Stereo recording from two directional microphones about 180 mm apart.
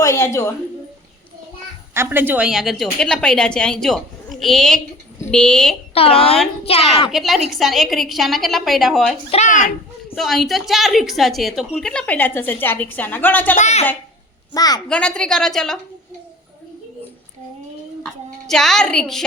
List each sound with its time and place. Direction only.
0.0 s a woman's voice: 15° left (ahead or behind)
1.9 s a woman's voice: 10° right (ahead or behind); by 5.7 s 5° left (ahead or behind)
5.9 s a woman's voice: 30° left (ahead or behind)
7.1 s a woman's voice: centre (ahead or behind)
9.3 s a child's voice: 40° left (ahead or behind)
10.2 s a woman's voice: centre (ahead or behind)
13.6 s a woman's voice: 40° left (ahead or behind)
14.5 s a woman's voice: 20° left (ahead or behind)
14.8 s a woman's voice: 5° left (ahead or behind)
18.0 s speech: centre (ahead or behind)